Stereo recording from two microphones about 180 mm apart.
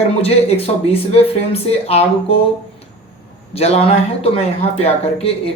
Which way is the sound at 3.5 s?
35° left (ahead or behind).